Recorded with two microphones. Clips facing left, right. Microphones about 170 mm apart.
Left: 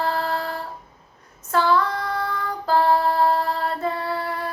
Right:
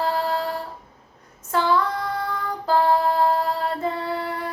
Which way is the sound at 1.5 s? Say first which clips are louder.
Left 1 dB; 20° right (ahead or behind).